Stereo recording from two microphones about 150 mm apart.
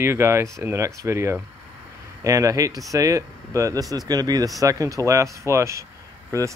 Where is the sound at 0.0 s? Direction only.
15° right (ahead or behind).